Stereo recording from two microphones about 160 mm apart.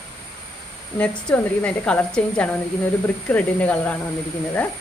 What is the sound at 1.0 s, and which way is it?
Speech, 5° left (ahead or behind).